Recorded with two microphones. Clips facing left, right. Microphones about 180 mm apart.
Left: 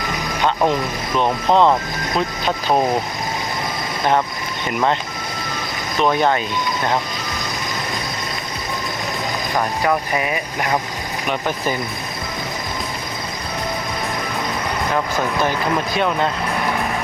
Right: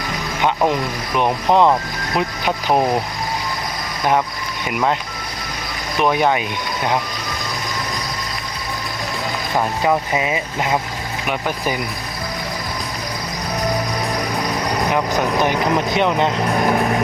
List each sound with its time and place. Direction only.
0.7 s speech: 15° right (ahead or behind)
6.0 s speech: 10° right (ahead or behind)
9.8 s speech: 15° right (ahead or behind)
14.9 s speech: 15° right (ahead or behind)